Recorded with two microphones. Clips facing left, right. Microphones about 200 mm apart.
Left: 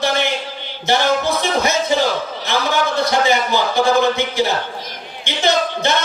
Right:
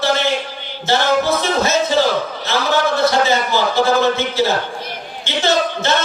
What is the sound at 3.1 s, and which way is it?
Speech, 15° left (ahead or behind).